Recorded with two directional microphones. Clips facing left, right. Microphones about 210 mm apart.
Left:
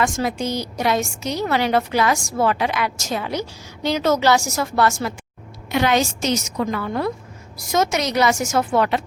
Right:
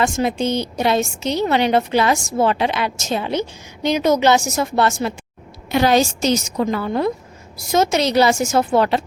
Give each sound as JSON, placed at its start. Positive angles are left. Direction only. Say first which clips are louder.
{"t": 0.0, "sound": "a woman's voice", "louder": "right 3 dB", "side_deg": -25}
{"t": 5.7, "sound": "a woman's voice", "louder": "right 3 dB", "side_deg": -35}